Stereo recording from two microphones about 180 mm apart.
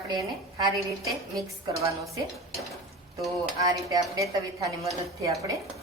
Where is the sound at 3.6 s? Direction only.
20° right (ahead or behind).